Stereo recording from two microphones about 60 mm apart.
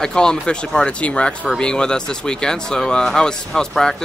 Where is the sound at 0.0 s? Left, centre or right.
Centre.